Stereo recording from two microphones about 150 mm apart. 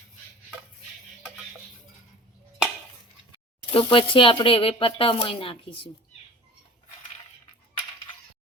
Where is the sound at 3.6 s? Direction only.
35° left (ahead or behind).